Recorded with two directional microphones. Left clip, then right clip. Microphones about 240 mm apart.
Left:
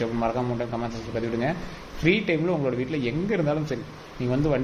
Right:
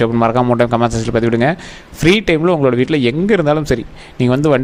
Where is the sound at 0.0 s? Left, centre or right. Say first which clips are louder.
Right 13 dB; right.